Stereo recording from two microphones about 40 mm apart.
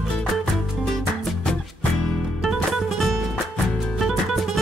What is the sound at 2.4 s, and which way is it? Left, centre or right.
Music, centre.